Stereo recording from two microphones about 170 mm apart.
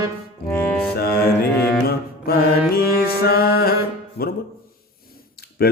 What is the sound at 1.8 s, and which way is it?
Mantra, 65° left (ahead or behind).